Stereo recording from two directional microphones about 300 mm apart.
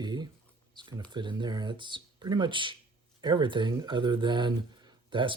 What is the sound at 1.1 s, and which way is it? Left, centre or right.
Speech, centre.